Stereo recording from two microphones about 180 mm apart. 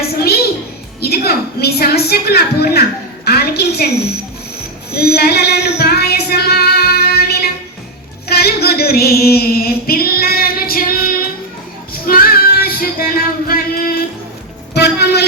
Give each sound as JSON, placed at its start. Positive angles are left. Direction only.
{"t": 1.0, "sound": "a woman's voice", "side_deg": 60}
{"t": 4.9, "sound": "child singing", "side_deg": 60}
{"t": 14.7, "sound": "music", "side_deg": 65}